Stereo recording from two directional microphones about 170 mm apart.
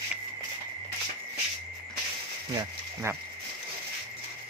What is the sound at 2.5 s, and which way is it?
Speech, 20° right (ahead or behind).